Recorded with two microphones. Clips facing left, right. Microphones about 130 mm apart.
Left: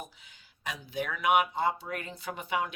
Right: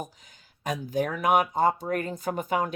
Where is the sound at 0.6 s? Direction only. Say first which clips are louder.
Right 8 dB; 45° right (ahead or behind).